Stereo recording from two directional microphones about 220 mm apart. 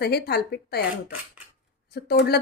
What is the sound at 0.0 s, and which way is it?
Speech, 45° left (ahead or behind).